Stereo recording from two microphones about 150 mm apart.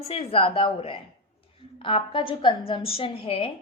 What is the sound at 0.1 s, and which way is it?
A woman's voice, 40° left (ahead or behind).